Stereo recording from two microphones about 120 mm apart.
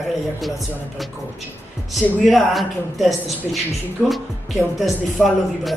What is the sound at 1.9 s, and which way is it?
A woman's voice, centre (ahead or behind).